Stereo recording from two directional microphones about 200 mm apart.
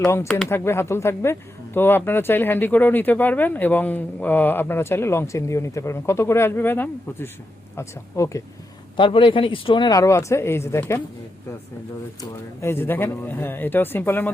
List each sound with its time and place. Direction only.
0.0 s speech: 15° left (ahead or behind)
9.0 s speech: 25° left (ahead or behind)
12.6 s speech: 10° left (ahead or behind)